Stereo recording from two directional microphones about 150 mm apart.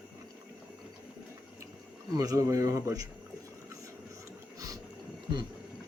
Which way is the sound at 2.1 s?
25° right (ahead or behind).